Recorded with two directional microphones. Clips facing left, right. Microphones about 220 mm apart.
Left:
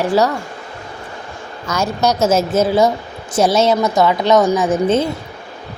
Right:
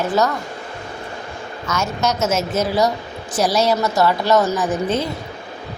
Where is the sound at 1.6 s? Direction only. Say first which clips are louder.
Left 4 dB; 35° left (ahead or behind).